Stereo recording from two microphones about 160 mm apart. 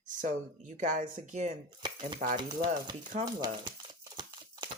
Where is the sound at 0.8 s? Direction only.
50° right (ahead or behind).